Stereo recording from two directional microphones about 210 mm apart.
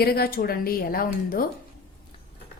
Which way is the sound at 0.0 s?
45° left (ahead or behind).